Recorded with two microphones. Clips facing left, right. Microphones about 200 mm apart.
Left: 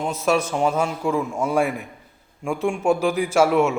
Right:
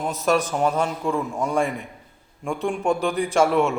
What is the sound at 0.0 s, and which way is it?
A man's voice, centre (ahead or behind).